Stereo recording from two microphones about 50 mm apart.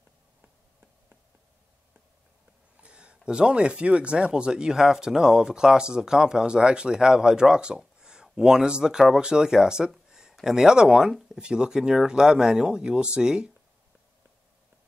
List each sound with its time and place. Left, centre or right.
2.8 s speech: right